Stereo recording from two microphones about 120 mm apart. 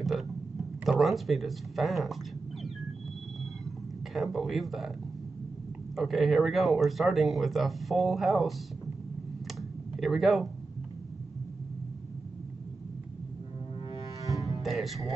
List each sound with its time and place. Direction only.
0.8 s speech: centre (ahead or behind)
4.1 s speech: centre (ahead or behind)
5.9 s speech: centre (ahead or behind)
9.6 s computer keyboard: centre (ahead or behind)
14.6 s music: centre (ahead or behind)